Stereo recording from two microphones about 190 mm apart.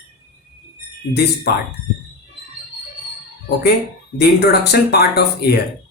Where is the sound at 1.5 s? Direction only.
55° left (ahead or behind).